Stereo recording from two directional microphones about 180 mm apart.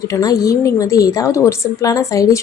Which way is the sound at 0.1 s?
20° left (ahead or behind).